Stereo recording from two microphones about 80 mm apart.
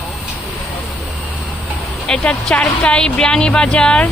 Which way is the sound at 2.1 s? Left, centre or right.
Centre.